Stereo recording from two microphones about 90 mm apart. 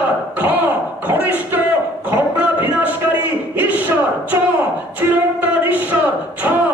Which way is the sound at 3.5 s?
20° right (ahead or behind).